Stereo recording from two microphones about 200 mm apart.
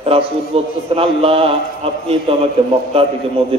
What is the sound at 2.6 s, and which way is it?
Speech, 30° right (ahead or behind).